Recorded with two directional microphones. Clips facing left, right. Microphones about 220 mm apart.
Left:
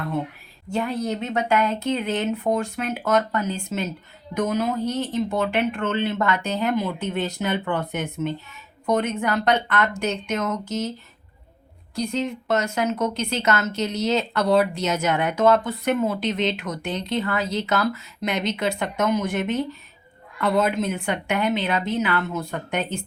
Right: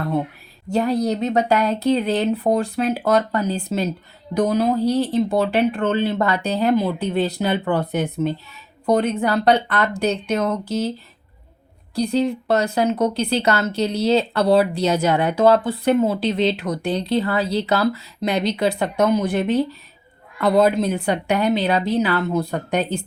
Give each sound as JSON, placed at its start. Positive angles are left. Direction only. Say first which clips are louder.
{"t": 0.7, "sound": "speech", "louder": "right 6 dB", "side_deg": -40}
{"t": 11.9, "sound": "speech", "louder": "right 6 dB", "side_deg": -35}